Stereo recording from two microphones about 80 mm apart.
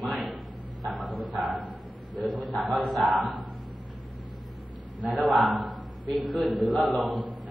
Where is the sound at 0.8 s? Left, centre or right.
Centre.